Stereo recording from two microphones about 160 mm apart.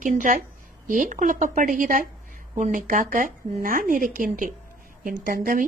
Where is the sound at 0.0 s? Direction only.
55° right (ahead or behind).